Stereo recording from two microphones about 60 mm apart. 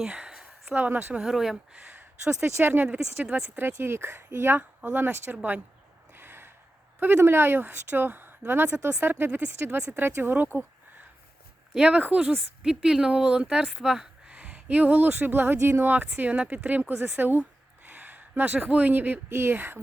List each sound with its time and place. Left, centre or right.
0.1 s a sound: centre
0.8 s speech: right
1.2 s speech: centre
2.4 s speech: right
4.8 s speech: right
6.1 s gasp: right
7.2 s speech: right
11.7 s speech: centre
12.3 s speech: centre
14.3 s speech: right